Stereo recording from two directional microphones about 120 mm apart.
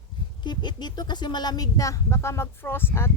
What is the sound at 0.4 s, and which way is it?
A woman's voice, 40° left (ahead or behind).